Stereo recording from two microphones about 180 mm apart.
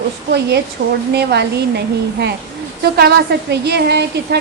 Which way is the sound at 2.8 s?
60° right (ahead or behind).